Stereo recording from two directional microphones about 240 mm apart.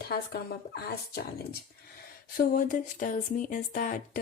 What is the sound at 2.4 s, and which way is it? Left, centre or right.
Speech, left.